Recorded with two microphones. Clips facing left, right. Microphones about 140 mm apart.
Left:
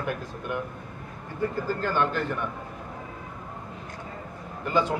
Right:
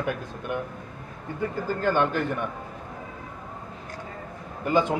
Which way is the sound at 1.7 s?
20° right (ahead or behind).